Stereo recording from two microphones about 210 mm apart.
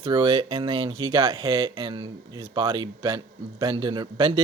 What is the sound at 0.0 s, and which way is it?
Speech, 25° right (ahead or behind).